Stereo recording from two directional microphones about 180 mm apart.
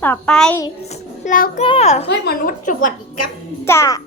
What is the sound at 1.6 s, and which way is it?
Speech, 35° left (ahead or behind).